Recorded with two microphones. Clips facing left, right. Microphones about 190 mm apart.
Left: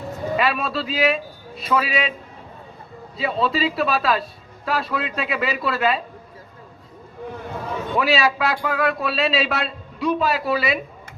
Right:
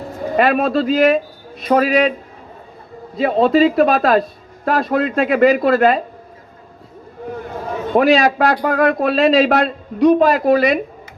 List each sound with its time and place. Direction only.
0.3 s speech: 50° right (ahead or behind)
3.2 s speech: 50° right (ahead or behind)
7.9 s speech: 45° right (ahead or behind)